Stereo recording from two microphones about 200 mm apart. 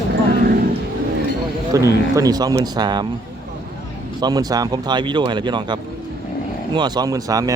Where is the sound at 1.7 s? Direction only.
15° right (ahead or behind).